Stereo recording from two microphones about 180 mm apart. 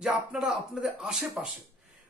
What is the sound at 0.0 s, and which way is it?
Speech, 5° right (ahead or behind).